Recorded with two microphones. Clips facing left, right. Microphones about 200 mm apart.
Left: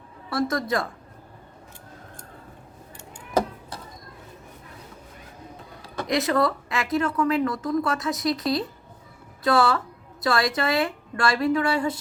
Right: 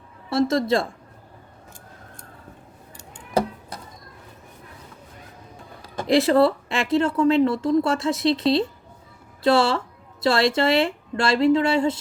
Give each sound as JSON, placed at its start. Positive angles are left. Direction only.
{"t": 0.3, "sound": "speech", "side_deg": -25}
{"t": 6.1, "sound": "speech", "side_deg": -30}